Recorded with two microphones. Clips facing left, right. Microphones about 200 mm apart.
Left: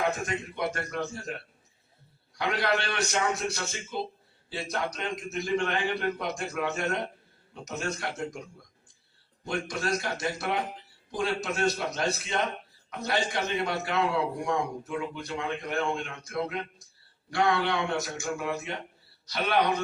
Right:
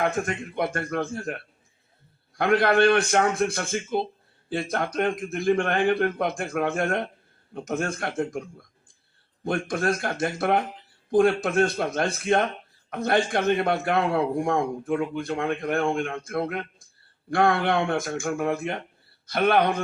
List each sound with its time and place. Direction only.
0.0 s a man's voice: 55° right (ahead or behind)